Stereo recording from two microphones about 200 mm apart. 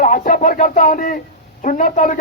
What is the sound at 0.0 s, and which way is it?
A man's voice, 40° left (ahead or behind).